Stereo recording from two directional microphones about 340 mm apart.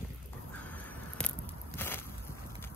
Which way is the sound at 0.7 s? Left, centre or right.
Centre.